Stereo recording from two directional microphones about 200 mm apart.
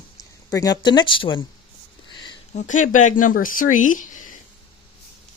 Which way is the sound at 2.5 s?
40° left (ahead or behind).